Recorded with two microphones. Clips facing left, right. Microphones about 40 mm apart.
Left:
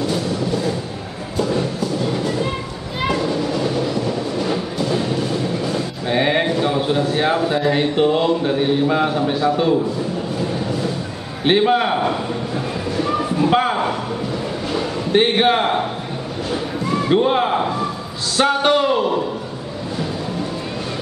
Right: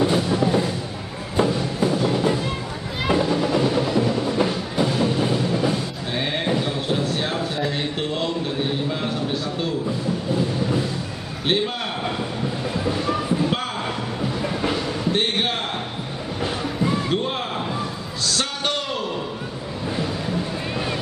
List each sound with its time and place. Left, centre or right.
0.0 s music: right
3.1 s train: right
6.0 s a sound: left
8.9 s a man's voice: left
11.4 s a man's voice: centre
13.5 s a sound: left
15.1 s a man's voice: centre
16.9 s speech: centre